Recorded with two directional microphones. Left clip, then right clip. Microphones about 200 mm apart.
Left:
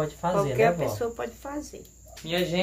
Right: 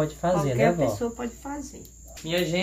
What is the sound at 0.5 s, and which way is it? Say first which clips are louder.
Speech: even; 60° left (ahead or behind).